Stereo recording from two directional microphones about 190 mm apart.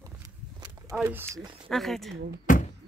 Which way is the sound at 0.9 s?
5° right (ahead or behind).